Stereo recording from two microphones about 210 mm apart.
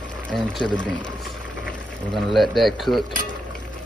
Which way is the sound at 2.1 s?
Centre (ahead or behind).